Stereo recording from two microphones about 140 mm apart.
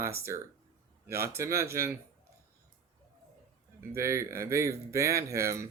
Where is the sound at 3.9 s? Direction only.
20° right (ahead or behind).